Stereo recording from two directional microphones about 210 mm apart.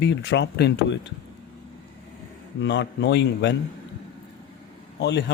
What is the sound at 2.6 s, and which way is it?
Speech, 55° left (ahead or behind).